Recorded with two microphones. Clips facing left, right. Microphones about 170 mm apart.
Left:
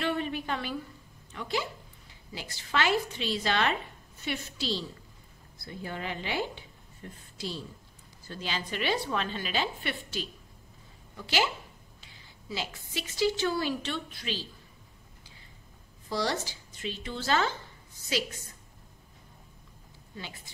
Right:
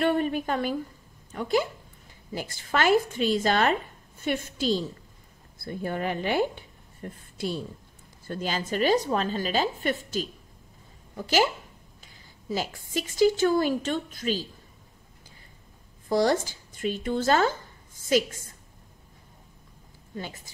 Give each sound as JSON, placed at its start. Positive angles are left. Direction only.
{"t": 0.0, "sound": "a woman's voice", "side_deg": -50}
{"t": 16.1, "sound": "speech", "side_deg": -50}
{"t": 20.2, "sound": "speech", "side_deg": -45}